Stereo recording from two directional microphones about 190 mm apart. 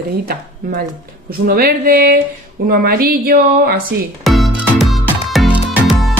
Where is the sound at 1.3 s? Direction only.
55° right (ahead or behind).